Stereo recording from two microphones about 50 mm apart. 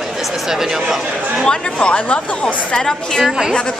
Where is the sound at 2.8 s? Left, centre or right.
Centre.